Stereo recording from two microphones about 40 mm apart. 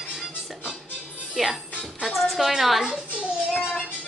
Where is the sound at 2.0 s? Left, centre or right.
Centre.